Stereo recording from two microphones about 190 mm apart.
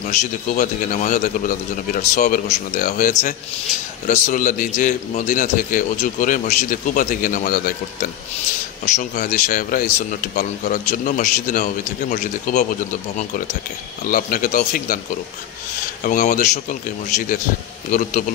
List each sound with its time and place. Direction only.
0.1 s a man's voice: 40° left (ahead or behind)
8.8 s a man's voice: 40° left (ahead or behind)
14.0 s a man's voice: 45° left (ahead or behind)
16.0 s a man's voice: 45° left (ahead or behind)